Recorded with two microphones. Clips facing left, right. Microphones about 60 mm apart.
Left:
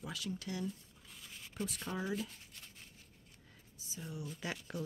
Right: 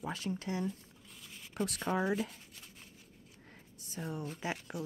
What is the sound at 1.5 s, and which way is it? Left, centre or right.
Speech, right.